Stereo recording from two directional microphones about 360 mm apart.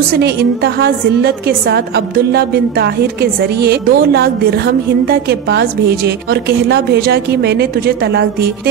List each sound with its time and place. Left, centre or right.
0.7 s a woman's voice: right